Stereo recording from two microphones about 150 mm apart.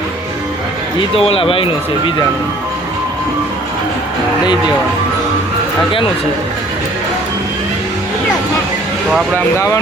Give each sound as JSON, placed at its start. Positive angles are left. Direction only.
{"t": 1.1, "sound": "speech", "side_deg": 40}